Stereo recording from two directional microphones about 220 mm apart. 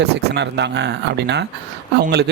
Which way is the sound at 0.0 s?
50° right (ahead or behind).